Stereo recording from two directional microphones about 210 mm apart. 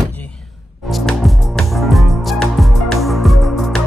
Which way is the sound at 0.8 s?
Centre (ahead or behind).